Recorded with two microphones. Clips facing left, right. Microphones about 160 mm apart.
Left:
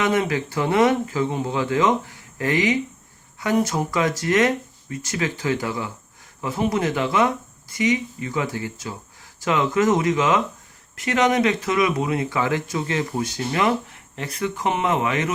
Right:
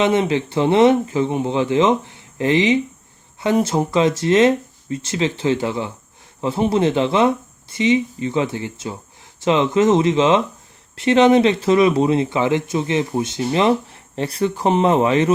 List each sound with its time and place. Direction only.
0.0 s speech: 25° right (ahead or behind)